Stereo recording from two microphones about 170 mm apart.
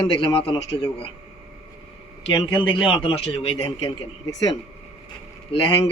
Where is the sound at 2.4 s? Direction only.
30° left (ahead or behind).